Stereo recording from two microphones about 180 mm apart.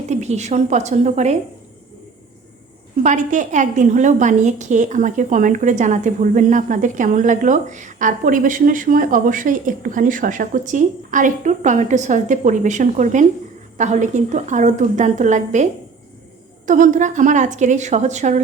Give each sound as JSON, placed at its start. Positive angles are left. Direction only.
{"t": 0.1, "sound": "a woman's voice", "side_deg": -40}
{"t": 3.0, "sound": "a woman's voice", "side_deg": -45}
{"t": 16.6, "sound": "a woman's voice", "side_deg": -45}